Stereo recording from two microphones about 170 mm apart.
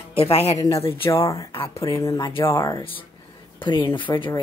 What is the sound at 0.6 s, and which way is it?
Speech, 20° left (ahead or behind).